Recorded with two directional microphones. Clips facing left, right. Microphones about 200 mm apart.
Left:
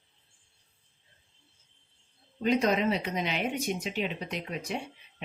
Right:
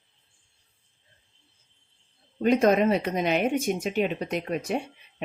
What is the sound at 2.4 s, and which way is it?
Speech, 50° right (ahead or behind).